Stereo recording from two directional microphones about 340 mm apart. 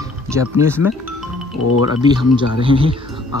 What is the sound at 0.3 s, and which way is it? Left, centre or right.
Speech, centre.